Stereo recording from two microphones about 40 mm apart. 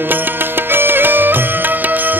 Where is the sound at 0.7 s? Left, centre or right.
Right.